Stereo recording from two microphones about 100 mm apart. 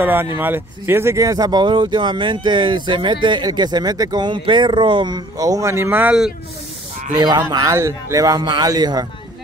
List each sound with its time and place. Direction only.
0.0 s speech: 20° right (ahead or behind)
7.2 s speech: 40° right (ahead or behind)
7.5 s speech: 30° right (ahead or behind)